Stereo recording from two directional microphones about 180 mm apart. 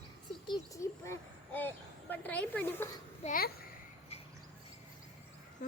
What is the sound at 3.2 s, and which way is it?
Speech, 55° left (ahead or behind).